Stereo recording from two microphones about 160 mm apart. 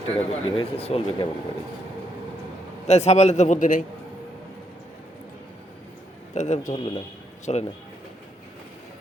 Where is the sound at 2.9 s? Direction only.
45° left (ahead or behind).